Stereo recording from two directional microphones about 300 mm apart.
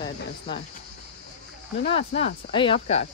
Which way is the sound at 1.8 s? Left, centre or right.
Centre.